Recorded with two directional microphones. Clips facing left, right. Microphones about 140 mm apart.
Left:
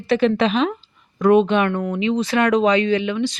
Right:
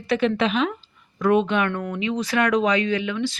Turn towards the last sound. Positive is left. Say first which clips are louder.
# left 4 dB
turn(degrees=20)  # may be behind; listen again after turning